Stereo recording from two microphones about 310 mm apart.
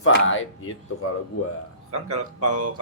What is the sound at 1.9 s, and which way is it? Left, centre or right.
Speech, right.